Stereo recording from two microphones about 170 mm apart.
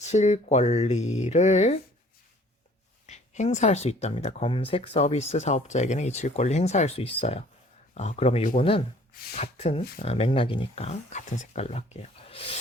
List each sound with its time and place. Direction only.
0.0 s speech: 40° left (ahead or behind)
3.1 s speech: 45° left (ahead or behind)